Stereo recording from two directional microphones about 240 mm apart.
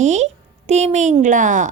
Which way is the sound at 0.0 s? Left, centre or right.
Right.